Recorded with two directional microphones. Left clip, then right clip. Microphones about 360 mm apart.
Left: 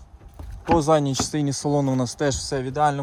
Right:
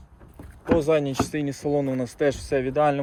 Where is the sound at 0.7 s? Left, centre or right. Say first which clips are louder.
Left 2 dB; centre.